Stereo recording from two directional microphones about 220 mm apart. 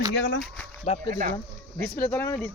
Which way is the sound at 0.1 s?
50° left (ahead or behind).